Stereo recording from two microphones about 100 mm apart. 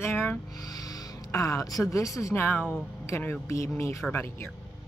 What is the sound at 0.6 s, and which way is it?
Speech, 40° left (ahead or behind).